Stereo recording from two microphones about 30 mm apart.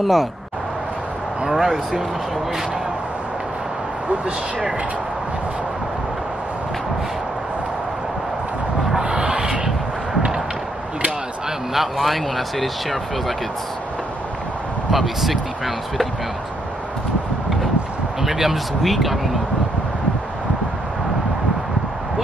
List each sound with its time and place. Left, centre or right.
0.0 s speech: centre
1.4 s speech: centre
9.0 s a sound: right
11.7 s speech: centre
14.9 s speech: centre
18.2 s speech: centre
18.8 s speech: centre